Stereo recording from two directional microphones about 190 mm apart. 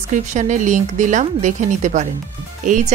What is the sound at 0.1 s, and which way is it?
A woman's voice, 40° right (ahead or behind).